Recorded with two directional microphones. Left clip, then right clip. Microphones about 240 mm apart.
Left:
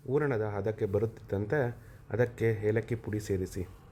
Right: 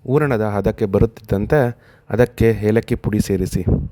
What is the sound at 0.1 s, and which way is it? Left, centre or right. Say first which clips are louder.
Speech: right 12 dB; right.